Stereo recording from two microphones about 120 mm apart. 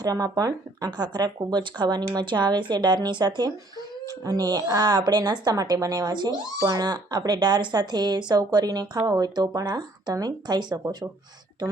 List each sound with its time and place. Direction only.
0.0 s speech: 30° right (ahead or behind)